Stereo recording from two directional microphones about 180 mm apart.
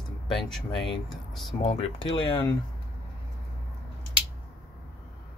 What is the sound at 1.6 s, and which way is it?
Speech, 35° left (ahead or behind).